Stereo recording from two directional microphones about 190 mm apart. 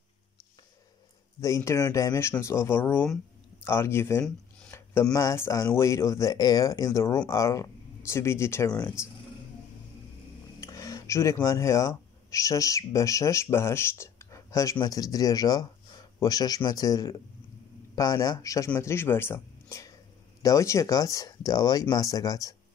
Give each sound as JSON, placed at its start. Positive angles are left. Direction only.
{"t": 1.4, "sound": "speech", "side_deg": 15}
{"t": 10.6, "sound": "speech", "side_deg": 15}